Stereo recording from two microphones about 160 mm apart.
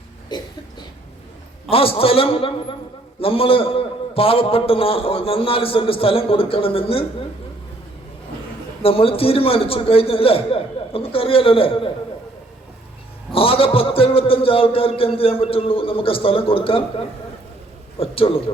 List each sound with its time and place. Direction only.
0.3 s a sound: 25° left (ahead or behind)
1.7 s a man's voice: 35° left (ahead or behind)
8.8 s a man's voice: 35° left (ahead or behind)
13.3 s a man's voice: 35° left (ahead or behind)